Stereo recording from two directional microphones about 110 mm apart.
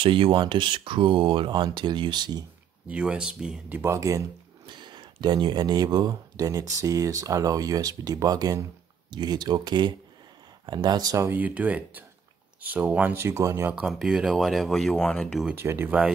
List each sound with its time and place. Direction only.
0.0 s speech: 50° right (ahead or behind)
2.9 s speech: 10° right (ahead or behind); by 4.2 s 30° right (ahead or behind)
4.6 s speech: 45° right (ahead or behind)
11.2 s speech: 15° right (ahead or behind)
13.2 s speech: 25° right (ahead or behind)
13.7 s speech: 10° right (ahead or behind); by 15.4 s 5° left (ahead or behind)
15.5 s speech: 20° right (ahead or behind)